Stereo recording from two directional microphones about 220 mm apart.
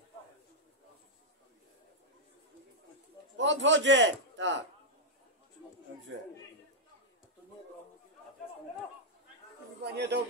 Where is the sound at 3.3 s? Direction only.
55° right (ahead or behind).